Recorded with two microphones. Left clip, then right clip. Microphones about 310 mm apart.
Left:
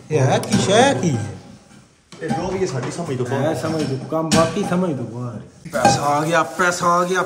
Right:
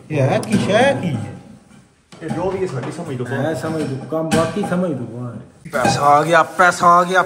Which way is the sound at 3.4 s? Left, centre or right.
Centre.